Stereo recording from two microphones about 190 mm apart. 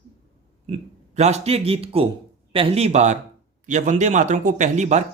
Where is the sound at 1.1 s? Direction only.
35° right (ahead or behind).